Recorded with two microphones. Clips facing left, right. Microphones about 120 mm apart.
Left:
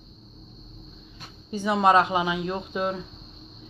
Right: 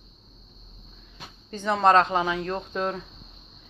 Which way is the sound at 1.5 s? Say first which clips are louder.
Even; 10° left (ahead or behind).